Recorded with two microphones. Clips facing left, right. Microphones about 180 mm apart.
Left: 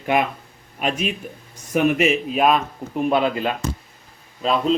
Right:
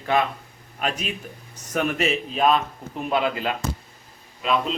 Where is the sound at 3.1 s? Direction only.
25° left (ahead or behind).